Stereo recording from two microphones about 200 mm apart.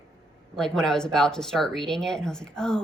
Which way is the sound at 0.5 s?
5° left (ahead or behind).